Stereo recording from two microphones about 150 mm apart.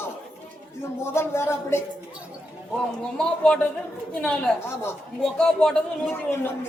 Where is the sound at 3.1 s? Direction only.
5° left (ahead or behind).